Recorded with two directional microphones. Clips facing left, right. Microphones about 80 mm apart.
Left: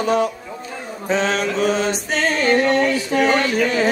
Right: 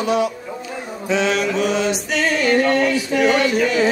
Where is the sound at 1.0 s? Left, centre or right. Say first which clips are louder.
Right 1 dB; left.